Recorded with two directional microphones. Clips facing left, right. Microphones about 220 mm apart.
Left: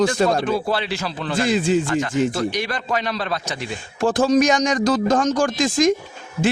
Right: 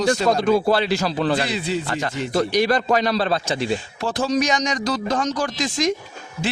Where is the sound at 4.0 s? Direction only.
50° left (ahead or behind).